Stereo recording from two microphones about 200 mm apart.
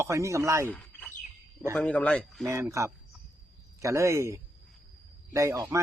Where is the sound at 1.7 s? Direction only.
5° left (ahead or behind).